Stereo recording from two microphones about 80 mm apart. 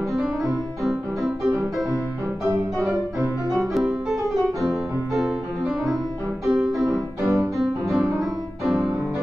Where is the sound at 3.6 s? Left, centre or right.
Centre.